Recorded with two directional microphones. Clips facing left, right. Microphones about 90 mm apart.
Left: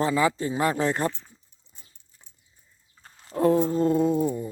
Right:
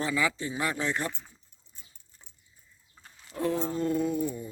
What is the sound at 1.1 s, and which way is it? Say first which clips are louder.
Speech: left 1 dB; 10° right (ahead or behind).